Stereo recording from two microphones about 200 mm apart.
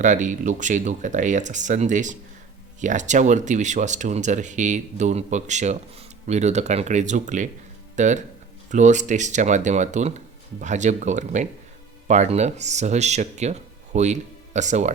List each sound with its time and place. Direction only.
0.0 s speech: 40° right (ahead or behind)